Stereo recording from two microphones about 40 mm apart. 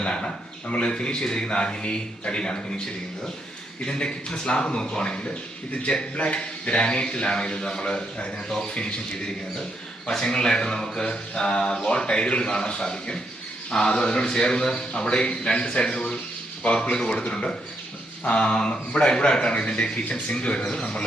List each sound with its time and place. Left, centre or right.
0.0 s a sound: left
0.7 s speech: left
3.8 s speech: left
10.1 s speech: centre
20.7 s speech: centre